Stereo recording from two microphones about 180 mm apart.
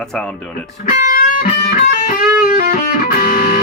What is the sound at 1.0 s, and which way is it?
Music, 50° left (ahead or behind).